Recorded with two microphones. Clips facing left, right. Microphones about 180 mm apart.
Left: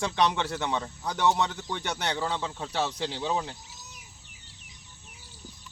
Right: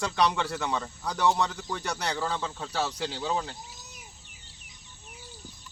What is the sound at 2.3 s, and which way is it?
Speech, 15° left (ahead or behind).